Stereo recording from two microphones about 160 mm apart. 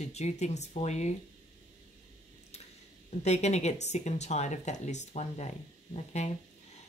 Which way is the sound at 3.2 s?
45° left (ahead or behind).